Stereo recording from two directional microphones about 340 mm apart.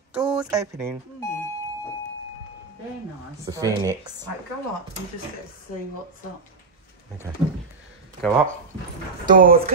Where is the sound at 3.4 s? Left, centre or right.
Centre.